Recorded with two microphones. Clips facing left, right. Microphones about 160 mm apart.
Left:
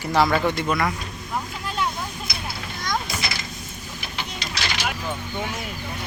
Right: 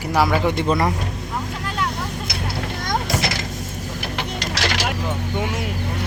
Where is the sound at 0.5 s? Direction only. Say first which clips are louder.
Right 4 dB; 30° right (ahead or behind).